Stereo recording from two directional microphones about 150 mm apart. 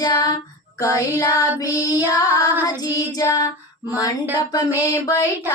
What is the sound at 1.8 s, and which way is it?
Child singing, 15° right (ahead or behind).